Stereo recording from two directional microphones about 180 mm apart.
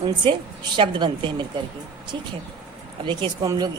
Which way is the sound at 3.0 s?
25° right (ahead or behind).